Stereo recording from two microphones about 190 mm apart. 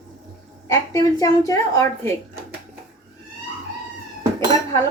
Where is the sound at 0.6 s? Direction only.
15° left (ahead or behind).